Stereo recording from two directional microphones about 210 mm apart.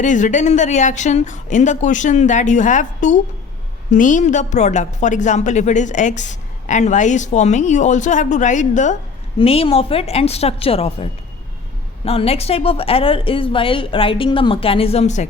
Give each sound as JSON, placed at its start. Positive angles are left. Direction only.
{"t": 0.0, "sound": "a woman's voice", "side_deg": 35}